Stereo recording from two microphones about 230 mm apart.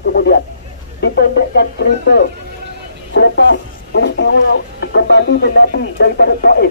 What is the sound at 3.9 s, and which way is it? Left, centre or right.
Speech, left.